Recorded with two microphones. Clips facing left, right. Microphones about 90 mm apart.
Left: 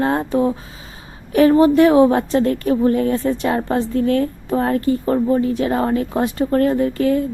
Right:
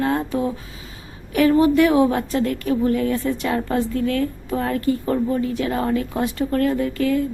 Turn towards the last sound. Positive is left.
turn(degrees=30)  # may be behind; listen again after turning